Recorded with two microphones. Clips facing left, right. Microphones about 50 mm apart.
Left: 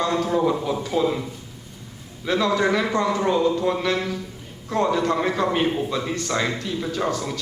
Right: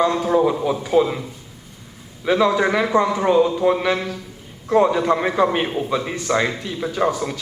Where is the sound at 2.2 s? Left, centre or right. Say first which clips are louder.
Right 4 dB; centre.